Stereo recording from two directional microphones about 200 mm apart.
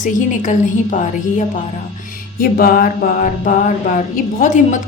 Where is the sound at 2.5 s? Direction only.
45° left (ahead or behind).